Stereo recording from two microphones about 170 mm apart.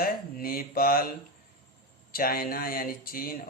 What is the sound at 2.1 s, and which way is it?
Speech, 60° left (ahead or behind).